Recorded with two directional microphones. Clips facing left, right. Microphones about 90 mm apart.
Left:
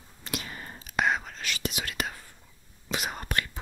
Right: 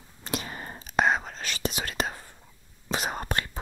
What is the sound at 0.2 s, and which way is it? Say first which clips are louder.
Whispering: right 3 dB; 30° right (ahead or behind).